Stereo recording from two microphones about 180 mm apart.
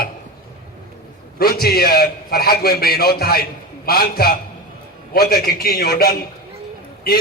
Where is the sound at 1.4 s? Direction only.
60° left (ahead or behind).